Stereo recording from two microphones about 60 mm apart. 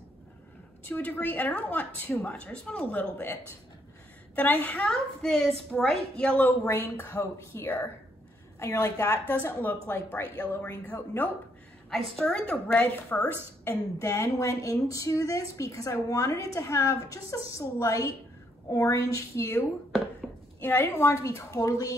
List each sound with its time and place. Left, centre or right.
0.8 s a woman's voice: left; by 2.9 s centre
3.2 s a woman's voice: left
4.4 s a woman's voice: left
5.2 s a woman's voice: centre
6.6 s a woman's voice: left
7.6 s a woman's voice: left
8.5 s a woman's voice: left
9.3 s a woman's voice: left
11.9 s a woman's voice: centre
12.8 s a woman's voice: left
13.7 s a woman's voice: left
20.6 s a woman's voice: left
20.9 s a woman's voice: left